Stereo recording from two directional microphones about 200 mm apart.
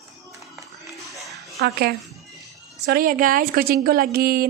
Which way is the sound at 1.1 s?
Centre (ahead or behind).